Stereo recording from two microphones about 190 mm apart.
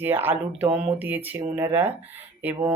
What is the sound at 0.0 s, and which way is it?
Speech, 10° right (ahead or behind).